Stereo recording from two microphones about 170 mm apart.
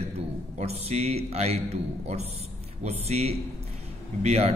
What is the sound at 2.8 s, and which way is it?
A man's voice, 40° right (ahead or behind).